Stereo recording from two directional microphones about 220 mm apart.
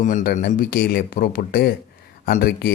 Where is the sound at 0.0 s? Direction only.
40° left (ahead or behind).